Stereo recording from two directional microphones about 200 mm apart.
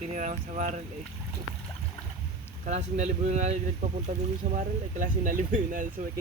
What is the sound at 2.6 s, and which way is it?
Speech, 35° right (ahead or behind).